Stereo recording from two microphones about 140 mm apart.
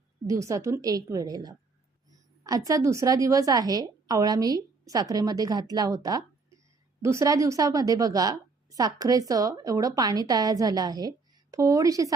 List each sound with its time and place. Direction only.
0.3 s a woman's voice: 20° right (ahead or behind)